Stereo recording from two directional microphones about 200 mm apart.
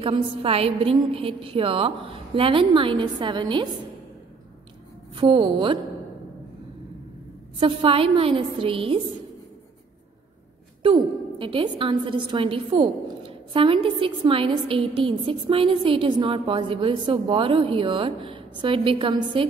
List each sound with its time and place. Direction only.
0.0 s a woman's voice: 30° right (ahead or behind)
5.1 s a woman's voice: 25° right (ahead or behind)
7.6 s a woman's voice: 25° right (ahead or behind)
10.8 s a woman's voice: 25° right (ahead or behind)